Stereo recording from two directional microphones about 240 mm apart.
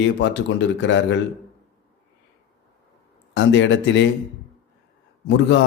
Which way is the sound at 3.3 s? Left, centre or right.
Left.